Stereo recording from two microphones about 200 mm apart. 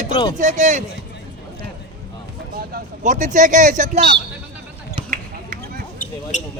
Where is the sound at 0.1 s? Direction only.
25° left (ahead or behind).